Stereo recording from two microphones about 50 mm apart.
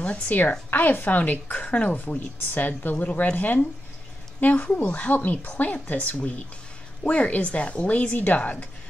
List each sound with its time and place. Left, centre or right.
0.3 s a woman's voice: left
3.1 s speech: left
3.3 s a woman's voice: left